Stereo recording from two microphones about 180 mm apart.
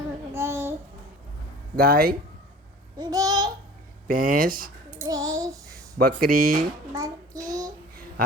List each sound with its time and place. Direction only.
0.3 s babbling: 15° right (ahead or behind)
1.7 s speech: 55° right (ahead or behind)
3.0 s babbling: 20° right (ahead or behind)
4.0 s speech: 50° right (ahead or behind)
4.9 s child singing: 20° right (ahead or behind)
6.0 s speech: 55° right (ahead or behind)
6.9 s child singing: 20° right (ahead or behind)